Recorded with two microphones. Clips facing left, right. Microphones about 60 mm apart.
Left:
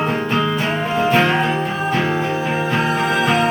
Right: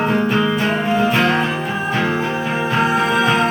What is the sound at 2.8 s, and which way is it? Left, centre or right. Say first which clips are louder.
Music: right 5 dB; centre.